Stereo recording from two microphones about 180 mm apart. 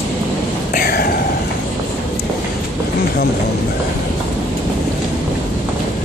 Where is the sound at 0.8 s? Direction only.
60° left (ahead or behind).